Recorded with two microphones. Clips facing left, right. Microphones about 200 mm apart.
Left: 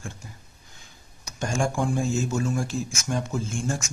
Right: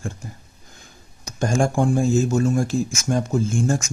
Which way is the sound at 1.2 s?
45° right (ahead or behind).